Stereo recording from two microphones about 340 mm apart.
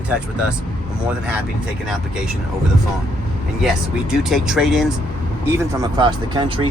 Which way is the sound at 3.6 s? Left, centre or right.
Centre.